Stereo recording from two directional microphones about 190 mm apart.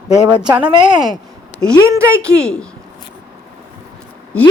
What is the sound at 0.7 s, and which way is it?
A woman's voice, 25° right (ahead or behind).